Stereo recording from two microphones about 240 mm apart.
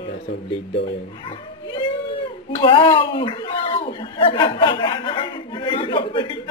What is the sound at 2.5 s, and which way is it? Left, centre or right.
Speech, left.